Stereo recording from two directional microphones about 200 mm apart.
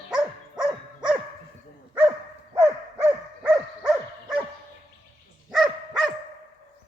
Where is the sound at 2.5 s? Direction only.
10° right (ahead or behind).